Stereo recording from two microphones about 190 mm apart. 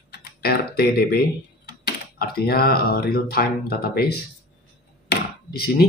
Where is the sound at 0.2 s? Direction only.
55° left (ahead or behind).